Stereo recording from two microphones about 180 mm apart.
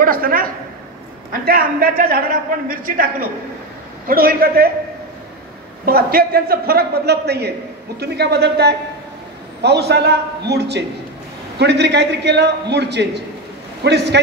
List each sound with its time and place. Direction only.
0.0 s a woman's voice: 55° right (ahead or behind)
5.9 s a man's voice: 60° right (ahead or behind)